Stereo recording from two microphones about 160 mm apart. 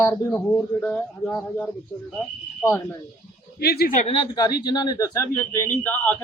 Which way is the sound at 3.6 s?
85° left.